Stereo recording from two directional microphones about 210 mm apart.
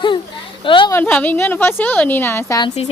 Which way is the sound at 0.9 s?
10° left (ahead or behind).